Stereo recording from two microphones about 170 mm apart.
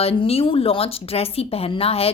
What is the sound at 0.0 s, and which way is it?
Speech, 35° left (ahead or behind).